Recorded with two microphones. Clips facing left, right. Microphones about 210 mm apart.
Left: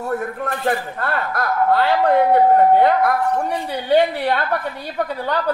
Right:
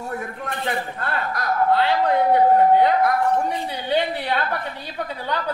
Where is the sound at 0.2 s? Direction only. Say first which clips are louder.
Left 6 dB; 50° left (ahead or behind).